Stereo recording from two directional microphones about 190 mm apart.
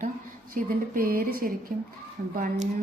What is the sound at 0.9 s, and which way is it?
Speech, 50° right (ahead or behind).